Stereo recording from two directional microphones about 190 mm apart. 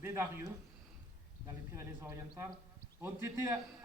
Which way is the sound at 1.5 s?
15° right (ahead or behind).